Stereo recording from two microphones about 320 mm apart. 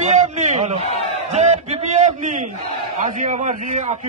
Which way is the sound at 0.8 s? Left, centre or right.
Centre.